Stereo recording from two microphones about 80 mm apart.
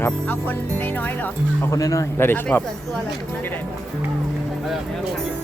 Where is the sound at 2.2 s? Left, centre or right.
Left.